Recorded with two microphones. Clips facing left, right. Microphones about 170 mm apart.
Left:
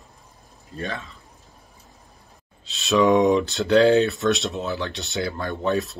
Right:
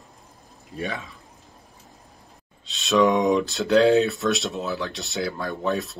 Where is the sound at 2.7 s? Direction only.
Centre (ahead or behind).